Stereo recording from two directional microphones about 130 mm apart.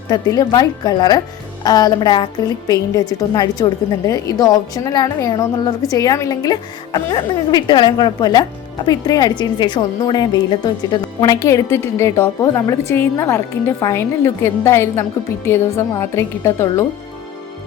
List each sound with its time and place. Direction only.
0.1 s a woman's voice: 30° left (ahead or behind)